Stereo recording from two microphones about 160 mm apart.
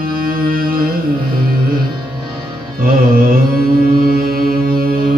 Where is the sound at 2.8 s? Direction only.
60° right (ahead or behind).